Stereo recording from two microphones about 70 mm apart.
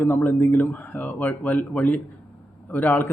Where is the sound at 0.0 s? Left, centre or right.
Left.